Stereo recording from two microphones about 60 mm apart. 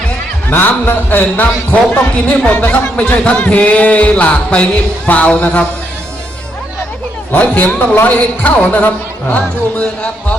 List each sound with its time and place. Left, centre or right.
0.5 s speech: left; by 5.6 s centre
7.3 s speech: left